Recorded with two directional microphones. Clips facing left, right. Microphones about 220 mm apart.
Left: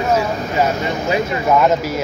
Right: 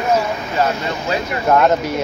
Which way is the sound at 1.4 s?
5° left (ahead or behind).